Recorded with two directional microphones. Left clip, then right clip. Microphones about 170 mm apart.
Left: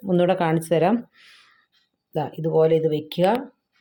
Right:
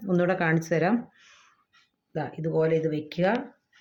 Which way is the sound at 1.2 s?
35° left (ahead or behind).